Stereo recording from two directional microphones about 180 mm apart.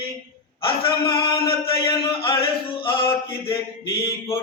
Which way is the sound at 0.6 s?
30° left (ahead or behind).